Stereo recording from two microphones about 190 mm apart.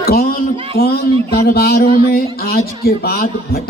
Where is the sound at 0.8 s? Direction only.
55° left (ahead or behind).